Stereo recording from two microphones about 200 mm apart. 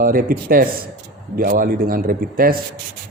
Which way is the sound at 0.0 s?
45° right (ahead or behind).